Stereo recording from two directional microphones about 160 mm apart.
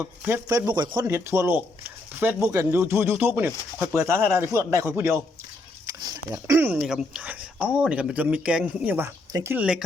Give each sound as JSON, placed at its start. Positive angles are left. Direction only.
{"t": 0.0, "sound": "speech", "side_deg": -10}
{"t": 5.8, "sound": "a sound", "side_deg": -20}
{"t": 6.7, "sound": "speech", "side_deg": -5}